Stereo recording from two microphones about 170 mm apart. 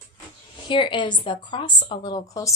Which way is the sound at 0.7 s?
30° left (ahead or behind).